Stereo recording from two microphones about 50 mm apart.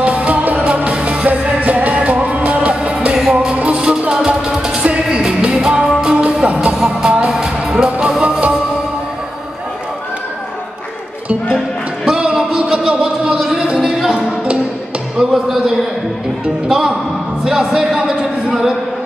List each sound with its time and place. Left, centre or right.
0.0 s music: right
6.7 s music: centre
8.2 s music: right
12.1 s a sound: centre
14.1 s music: right
16.6 s a sound: centre